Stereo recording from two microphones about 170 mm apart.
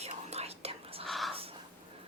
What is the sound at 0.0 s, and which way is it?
Whispering, 40° right (ahead or behind).